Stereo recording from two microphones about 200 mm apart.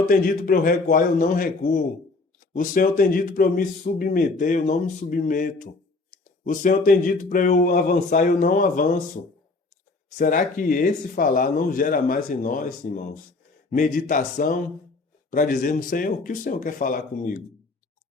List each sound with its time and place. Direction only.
0.1 s a man's voice: 45° left (ahead or behind)
10.2 s a man's voice: 45° left (ahead or behind)